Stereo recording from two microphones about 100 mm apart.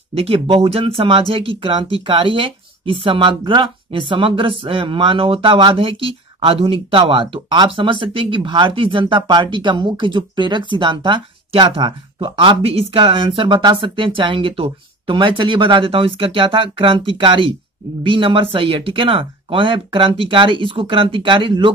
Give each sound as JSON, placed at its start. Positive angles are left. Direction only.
{"t": 0.1, "sound": "speech", "side_deg": -70}
{"t": 1.6, "sound": "speech", "side_deg": -50}